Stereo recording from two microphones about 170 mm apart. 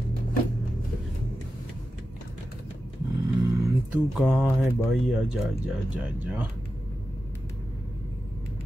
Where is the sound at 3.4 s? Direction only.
20° right (ahead or behind).